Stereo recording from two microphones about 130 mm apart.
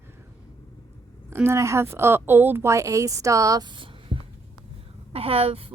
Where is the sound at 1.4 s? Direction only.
20° right (ahead or behind).